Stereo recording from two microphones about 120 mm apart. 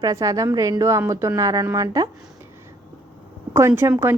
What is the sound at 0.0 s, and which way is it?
Speech, 30° right (ahead or behind).